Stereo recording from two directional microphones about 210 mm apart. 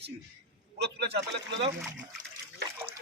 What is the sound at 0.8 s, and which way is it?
Speech, 55° right (ahead or behind).